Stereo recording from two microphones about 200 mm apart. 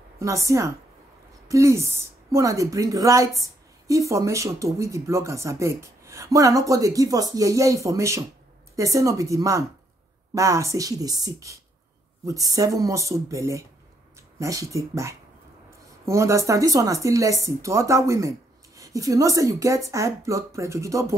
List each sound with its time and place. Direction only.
0.2 s a woman's voice: 15° right (ahead or behind)